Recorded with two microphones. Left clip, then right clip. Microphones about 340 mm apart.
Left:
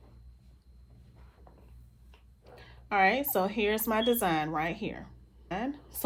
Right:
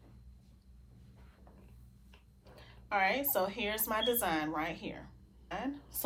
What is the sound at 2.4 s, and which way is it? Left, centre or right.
A woman's voice, left.